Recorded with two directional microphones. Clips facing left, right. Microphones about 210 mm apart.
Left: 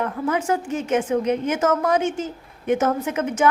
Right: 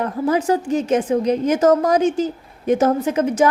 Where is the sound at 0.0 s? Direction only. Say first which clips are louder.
Right 4 dB; 35° right (ahead or behind).